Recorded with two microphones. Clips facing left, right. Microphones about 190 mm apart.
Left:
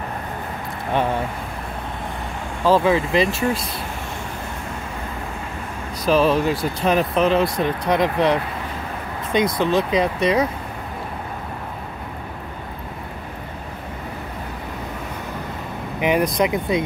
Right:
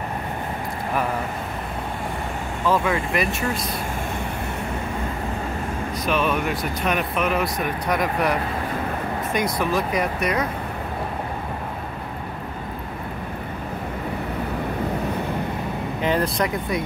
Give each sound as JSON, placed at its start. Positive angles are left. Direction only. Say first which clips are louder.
{"t": 2.6, "sound": "speech", "louder": "left 5 dB", "side_deg": 30}
{"t": 6.0, "sound": "speech", "louder": "left 6 dB", "side_deg": 35}
{"t": 16.0, "sound": "speech", "louder": "left 4 dB", "side_deg": 15}